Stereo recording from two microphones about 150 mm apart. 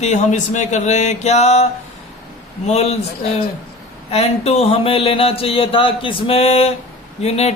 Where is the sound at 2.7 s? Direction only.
45° left (ahead or behind).